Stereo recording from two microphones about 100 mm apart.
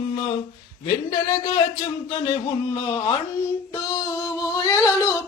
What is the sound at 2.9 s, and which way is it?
Speech, 45° left (ahead or behind).